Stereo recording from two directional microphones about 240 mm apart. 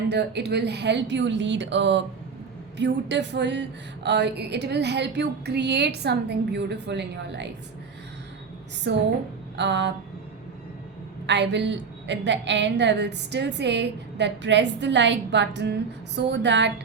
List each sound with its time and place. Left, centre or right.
0.1 s a woman's voice: right
8.9 s a woman's voice: right
11.3 s a woman's voice: right